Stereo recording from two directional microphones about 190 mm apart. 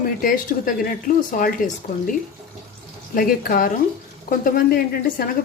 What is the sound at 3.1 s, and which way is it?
A woman's voice, 45° left (ahead or behind).